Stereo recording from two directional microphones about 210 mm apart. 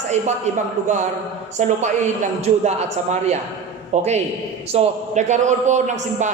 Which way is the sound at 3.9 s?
35° right (ahead or behind).